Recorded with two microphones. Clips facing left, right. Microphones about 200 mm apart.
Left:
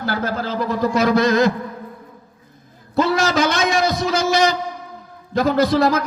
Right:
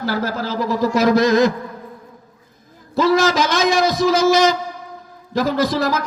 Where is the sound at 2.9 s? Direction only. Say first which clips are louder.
Right 2 dB; 60° left (ahead or behind).